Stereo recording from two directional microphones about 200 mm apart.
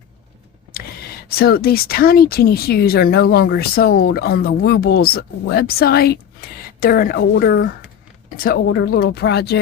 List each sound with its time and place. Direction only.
1.3 s speech: 50° left (ahead or behind)